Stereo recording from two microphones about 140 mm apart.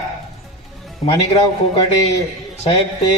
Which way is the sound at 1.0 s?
35° left (ahead or behind).